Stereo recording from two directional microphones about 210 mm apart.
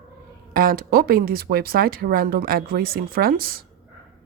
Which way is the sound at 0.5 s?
45° right (ahead or behind).